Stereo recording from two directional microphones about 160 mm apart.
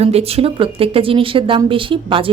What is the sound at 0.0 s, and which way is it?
Speech, 40° right (ahead or behind).